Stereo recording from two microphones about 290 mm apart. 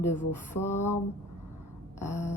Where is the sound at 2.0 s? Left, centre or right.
Centre.